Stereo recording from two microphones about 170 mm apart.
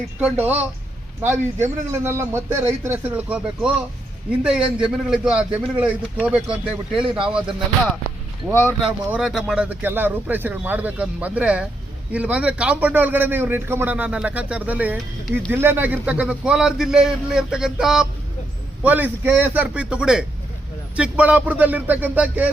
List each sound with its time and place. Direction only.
0.2 s a man's voice: 10° right (ahead or behind)
6.9 s speech: 30° right (ahead or behind)
7.3 s a man's voice: 5° right (ahead or behind)
8.8 s a man's voice: 5° right (ahead or behind)